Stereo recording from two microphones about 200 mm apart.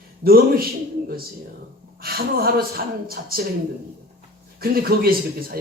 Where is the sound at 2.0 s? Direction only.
50° right (ahead or behind).